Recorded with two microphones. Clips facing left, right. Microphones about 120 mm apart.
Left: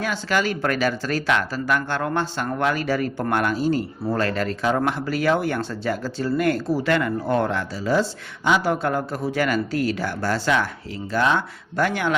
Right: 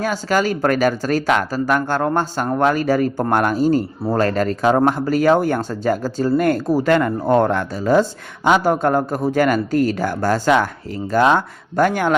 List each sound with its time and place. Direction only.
0.0 s speech: 40° right (ahead or behind)